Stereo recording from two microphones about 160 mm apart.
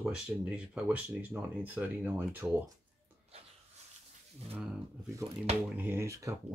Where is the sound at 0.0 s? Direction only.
5° right (ahead or behind).